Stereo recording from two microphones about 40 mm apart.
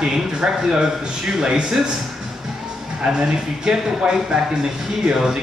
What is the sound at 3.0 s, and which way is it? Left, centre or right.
A man's voice, centre.